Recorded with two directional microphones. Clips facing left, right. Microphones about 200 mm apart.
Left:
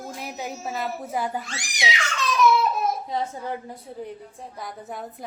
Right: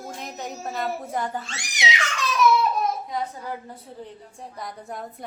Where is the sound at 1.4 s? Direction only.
25° right (ahead or behind).